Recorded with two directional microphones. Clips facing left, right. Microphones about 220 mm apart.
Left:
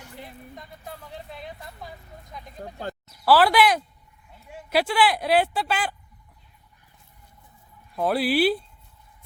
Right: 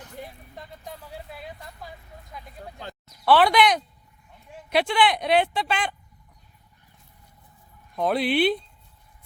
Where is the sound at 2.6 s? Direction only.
40° left (ahead or behind).